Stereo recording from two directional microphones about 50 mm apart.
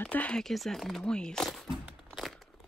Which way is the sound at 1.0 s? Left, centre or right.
Centre.